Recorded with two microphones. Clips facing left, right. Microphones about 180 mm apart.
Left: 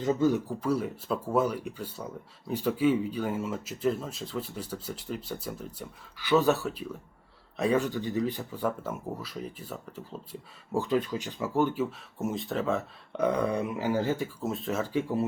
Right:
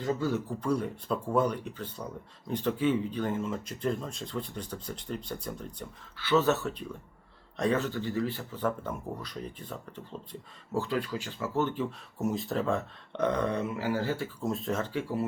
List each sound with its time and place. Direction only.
0.0 s speech: 20° left (ahead or behind)
10.7 s speech: 15° left (ahead or behind)
14.4 s speech: centre (ahead or behind)
14.9 s speech: 25° left (ahead or behind)